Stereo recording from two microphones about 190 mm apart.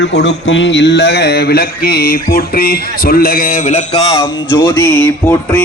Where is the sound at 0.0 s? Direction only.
65° left (ahead or behind); by 4.3 s 30° left (ahead or behind).